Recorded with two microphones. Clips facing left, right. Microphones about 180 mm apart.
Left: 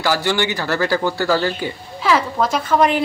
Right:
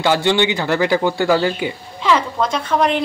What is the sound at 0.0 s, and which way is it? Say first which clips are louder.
Speech: right 3 dB; 20° right (ahead or behind).